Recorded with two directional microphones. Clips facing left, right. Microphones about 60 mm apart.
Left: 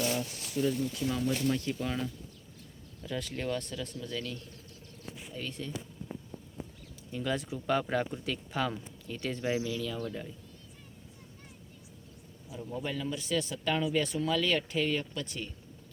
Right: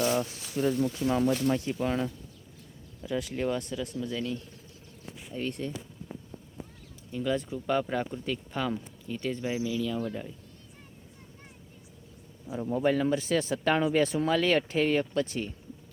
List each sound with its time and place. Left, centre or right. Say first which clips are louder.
0.0 s speech: right 5 dB; right
1.3 s speech: right 3 dB; centre
5.3 s speech: right 7 dB; right
7.1 s speech: right 4 dB; centre
12.5 s speech: right 10 dB; right